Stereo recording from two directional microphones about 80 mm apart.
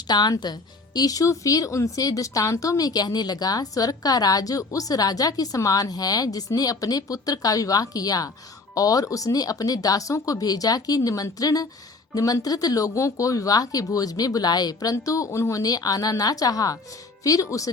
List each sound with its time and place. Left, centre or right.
0.1 s speech: left